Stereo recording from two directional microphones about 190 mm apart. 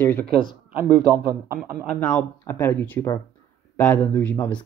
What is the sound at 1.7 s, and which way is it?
Speech, 5° left (ahead or behind).